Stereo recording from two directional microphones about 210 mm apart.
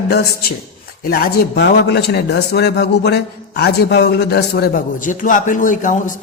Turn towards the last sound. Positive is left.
turn(degrees=40)  # may be behind; listen again after turning